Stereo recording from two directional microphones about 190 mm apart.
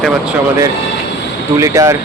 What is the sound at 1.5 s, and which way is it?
Speech, 15° right (ahead or behind).